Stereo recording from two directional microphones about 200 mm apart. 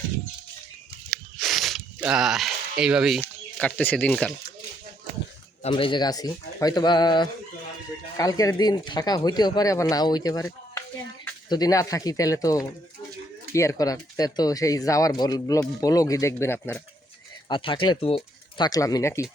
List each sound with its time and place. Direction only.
1.1 s a sound: centre (ahead or behind)
2.8 s speech: 5° right (ahead or behind)
3.2 s speech: 10° left (ahead or behind)
5.6 s speech: 25° left (ahead or behind)
17.5 s speech: 25° left (ahead or behind)